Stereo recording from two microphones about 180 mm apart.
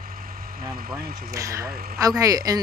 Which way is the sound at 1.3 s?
20° right (ahead or behind).